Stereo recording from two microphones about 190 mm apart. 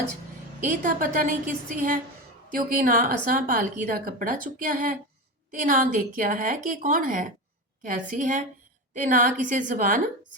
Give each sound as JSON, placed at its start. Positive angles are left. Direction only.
{"t": 0.6, "sound": "a woman's voice", "side_deg": -45}